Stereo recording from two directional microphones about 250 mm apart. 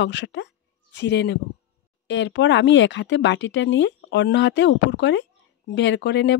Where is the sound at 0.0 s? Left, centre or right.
Left.